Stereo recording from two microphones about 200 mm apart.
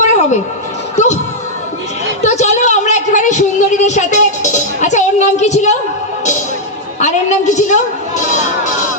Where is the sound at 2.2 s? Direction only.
35° left (ahead or behind).